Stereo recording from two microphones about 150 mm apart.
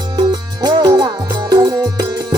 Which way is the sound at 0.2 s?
25° right (ahead or behind).